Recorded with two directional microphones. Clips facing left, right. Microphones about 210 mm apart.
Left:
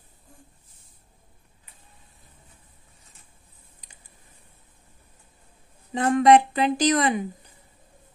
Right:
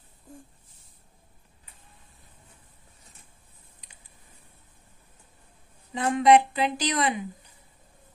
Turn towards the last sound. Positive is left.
turn(degrees=45)  # may be behind; listen again after turning